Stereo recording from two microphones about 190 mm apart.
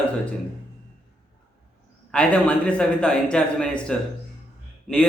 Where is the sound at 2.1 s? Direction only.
5° left (ahead or behind).